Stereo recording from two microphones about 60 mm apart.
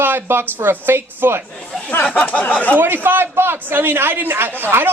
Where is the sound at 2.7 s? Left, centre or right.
Right.